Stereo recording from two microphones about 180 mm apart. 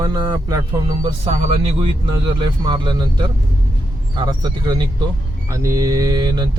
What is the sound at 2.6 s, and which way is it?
Speech, 25° right (ahead or behind).